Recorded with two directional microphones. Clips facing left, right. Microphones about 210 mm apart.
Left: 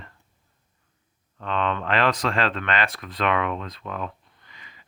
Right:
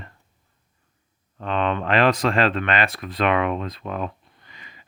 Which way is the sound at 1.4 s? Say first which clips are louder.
Right 3 dB; 10° right (ahead or behind).